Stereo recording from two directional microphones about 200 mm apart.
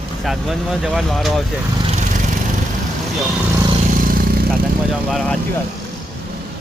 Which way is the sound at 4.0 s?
45° right (ahead or behind).